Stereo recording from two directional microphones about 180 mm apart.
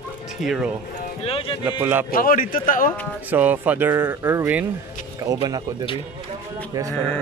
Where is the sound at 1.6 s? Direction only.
10° right (ahead or behind).